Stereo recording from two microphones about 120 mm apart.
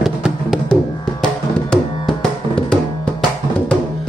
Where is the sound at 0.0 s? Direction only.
Centre (ahead or behind).